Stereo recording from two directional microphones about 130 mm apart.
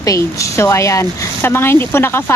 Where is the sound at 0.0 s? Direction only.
25° left (ahead or behind).